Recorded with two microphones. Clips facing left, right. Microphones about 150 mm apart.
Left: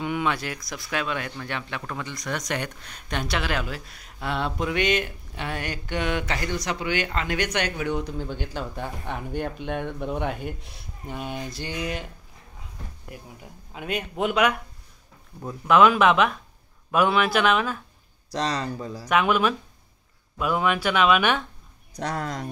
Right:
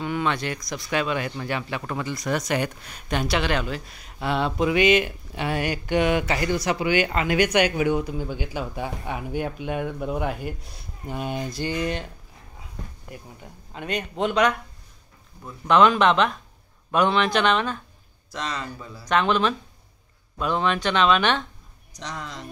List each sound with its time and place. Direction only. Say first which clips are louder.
0.0 s speech: right 1 dB; 15° left (ahead or behind)
13.1 s speech: even; 5° left (ahead or behind)
15.6 s speech: even; 5° left (ahead or behind)
18.3 s speech: left 4 dB; 35° left (ahead or behind)
19.0 s speech: even; 10° left (ahead or behind)
21.9 s speech: left 6 dB; 55° left (ahead or behind)